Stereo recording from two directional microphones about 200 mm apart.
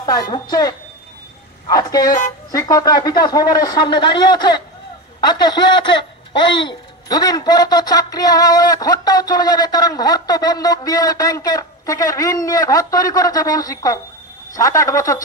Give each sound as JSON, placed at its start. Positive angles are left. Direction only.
{"t": 0.0, "sound": "speech", "side_deg": 20}